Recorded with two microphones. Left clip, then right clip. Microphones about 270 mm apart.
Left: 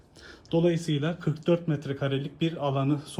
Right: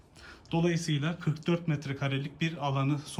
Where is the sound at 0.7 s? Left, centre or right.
Centre.